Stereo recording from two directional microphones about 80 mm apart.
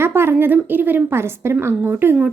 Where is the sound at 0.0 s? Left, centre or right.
Right.